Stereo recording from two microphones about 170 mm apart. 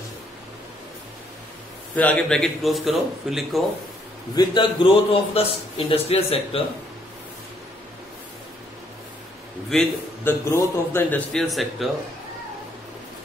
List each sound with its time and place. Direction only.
2.0 s speech: 10° left (ahead or behind)
4.4 s a man's voice: 20° left (ahead or behind)
9.7 s a man's voice: 5° left (ahead or behind)
10.5 s a man's voice: 15° left (ahead or behind)